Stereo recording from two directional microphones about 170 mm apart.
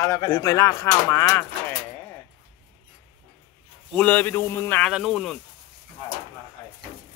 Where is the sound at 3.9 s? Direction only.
5° left (ahead or behind).